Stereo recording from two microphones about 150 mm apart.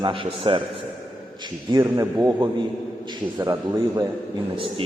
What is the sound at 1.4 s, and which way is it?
A man's voice, 30° right (ahead or behind).